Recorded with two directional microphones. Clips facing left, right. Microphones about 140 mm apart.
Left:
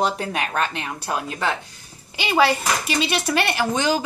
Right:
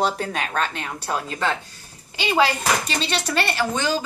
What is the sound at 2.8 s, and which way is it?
A woman's voice, 10° left (ahead or behind).